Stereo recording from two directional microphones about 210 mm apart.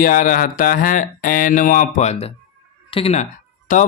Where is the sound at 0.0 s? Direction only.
40° left (ahead or behind).